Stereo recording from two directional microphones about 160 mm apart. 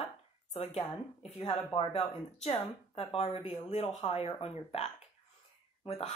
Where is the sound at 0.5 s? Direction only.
40° left (ahead or behind).